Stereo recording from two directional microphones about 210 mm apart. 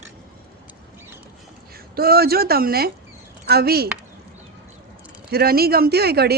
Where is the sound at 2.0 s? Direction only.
45° right (ahead or behind).